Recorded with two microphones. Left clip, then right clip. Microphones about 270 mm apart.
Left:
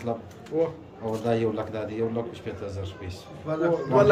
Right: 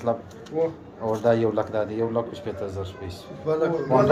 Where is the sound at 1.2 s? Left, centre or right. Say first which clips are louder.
Right 5 dB; centre.